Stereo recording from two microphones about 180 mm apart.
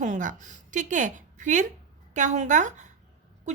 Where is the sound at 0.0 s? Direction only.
45° right (ahead or behind).